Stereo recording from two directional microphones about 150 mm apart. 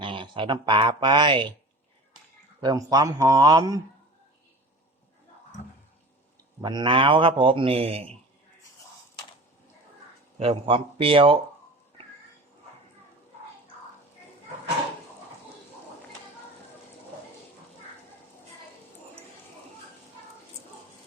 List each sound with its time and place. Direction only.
0.0 s speech: 35° right (ahead or behind)
2.6 s speech: 25° right (ahead or behind)
6.6 s speech: 30° right (ahead or behind)
10.5 s speech: 35° right (ahead or behind)